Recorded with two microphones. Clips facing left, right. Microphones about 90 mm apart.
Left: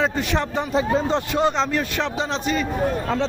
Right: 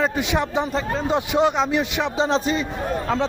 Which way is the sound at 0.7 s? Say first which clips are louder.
Left 4 dB; 5° left (ahead or behind).